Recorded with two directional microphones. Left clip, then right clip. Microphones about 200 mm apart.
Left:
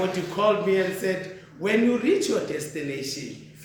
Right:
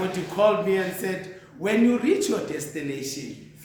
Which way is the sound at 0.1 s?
20° right (ahead or behind).